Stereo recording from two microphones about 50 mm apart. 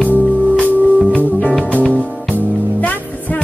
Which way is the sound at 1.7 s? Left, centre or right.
Left.